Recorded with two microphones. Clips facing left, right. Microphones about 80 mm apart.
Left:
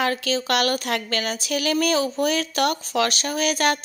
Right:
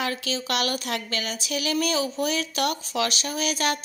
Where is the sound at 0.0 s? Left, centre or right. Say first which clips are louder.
Left 5 dB; left.